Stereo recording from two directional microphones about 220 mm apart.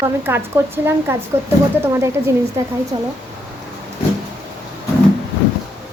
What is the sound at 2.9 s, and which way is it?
Speech, 25° right (ahead or behind).